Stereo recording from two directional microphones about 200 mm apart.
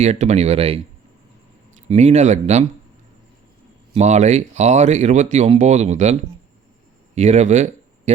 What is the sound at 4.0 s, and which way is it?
Speech, 35° right (ahead or behind).